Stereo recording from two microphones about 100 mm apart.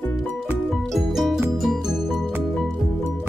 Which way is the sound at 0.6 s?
Centre (ahead or behind).